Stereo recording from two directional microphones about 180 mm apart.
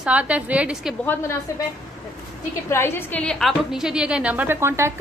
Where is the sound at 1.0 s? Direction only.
10° left (ahead or behind).